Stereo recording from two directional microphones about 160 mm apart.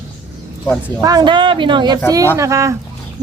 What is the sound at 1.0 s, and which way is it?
A woman's voice, 25° right (ahead or behind).